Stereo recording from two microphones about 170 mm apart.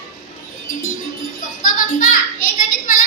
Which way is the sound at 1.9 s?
55° left (ahead or behind).